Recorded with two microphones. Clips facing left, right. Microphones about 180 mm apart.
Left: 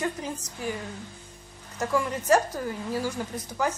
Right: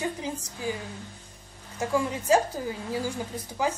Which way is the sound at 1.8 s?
15° right (ahead or behind).